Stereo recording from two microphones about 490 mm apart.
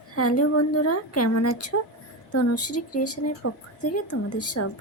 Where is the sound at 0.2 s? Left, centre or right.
Left.